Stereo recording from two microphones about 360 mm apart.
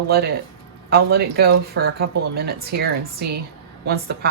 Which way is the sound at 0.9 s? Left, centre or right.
Right.